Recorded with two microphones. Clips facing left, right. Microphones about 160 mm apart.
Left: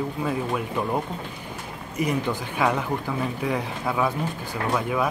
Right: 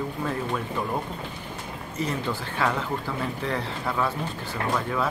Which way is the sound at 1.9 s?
15° left (ahead or behind).